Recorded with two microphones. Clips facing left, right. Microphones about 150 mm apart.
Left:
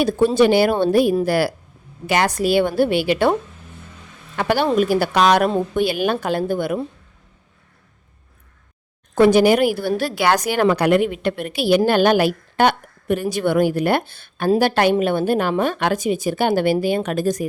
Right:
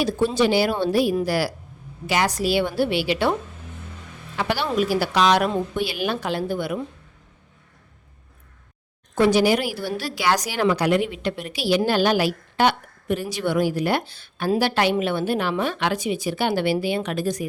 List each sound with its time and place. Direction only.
0.0 s a woman's voice: 55° left (ahead or behind)
4.4 s a woman's voice: 50° left (ahead or behind)
9.1 s a woman's voice: 55° left (ahead or behind)